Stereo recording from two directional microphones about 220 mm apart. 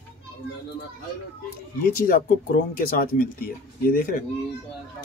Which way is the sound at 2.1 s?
40° left (ahead or behind).